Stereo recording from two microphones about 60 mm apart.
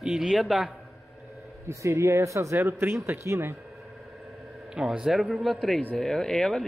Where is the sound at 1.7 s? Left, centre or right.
Right.